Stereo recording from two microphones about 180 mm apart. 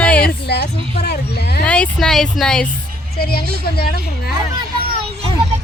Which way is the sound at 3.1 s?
60° left (ahead or behind).